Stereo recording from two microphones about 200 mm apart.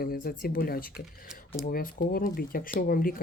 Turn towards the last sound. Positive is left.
turn(degrees=45)  # may be behind; listen again after turning